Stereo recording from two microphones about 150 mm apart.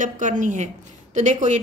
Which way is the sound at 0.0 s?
55° right (ahead or behind).